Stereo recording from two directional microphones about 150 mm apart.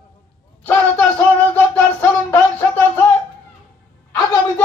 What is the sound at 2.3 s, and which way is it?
Music, 15° left (ahead or behind).